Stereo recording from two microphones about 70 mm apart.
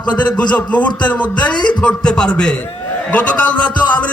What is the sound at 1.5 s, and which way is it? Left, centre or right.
Speech, left.